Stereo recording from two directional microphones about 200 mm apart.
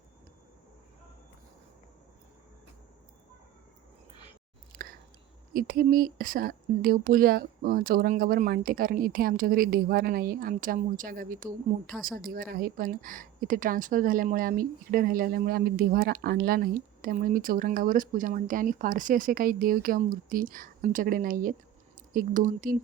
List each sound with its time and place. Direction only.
4.7 s chewing: 45° right (ahead or behind)
5.5 s a woman's voice: 45° right (ahead or behind)